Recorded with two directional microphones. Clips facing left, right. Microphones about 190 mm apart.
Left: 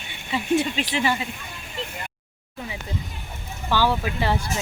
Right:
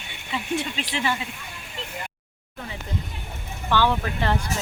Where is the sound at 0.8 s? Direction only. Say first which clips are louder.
Left 3 dB; 5° left (ahead or behind).